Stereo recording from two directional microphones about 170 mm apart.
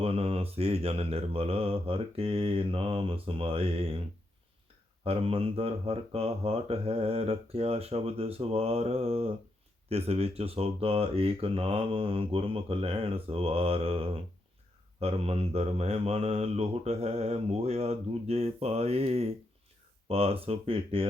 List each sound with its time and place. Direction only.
0.0 s speech: 35° right (ahead or behind)
5.0 s speech: 35° right (ahead or behind)